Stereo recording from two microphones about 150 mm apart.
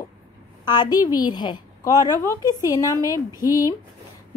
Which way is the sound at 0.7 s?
25° left (ahead or behind).